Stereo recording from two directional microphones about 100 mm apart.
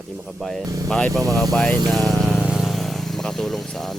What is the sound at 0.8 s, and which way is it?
Speech, 5° left (ahead or behind).